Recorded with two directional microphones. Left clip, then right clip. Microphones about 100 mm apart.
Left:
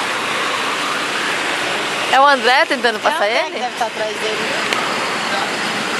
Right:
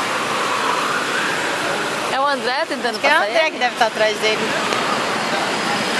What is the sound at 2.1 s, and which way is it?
Speech, 20° left (ahead or behind).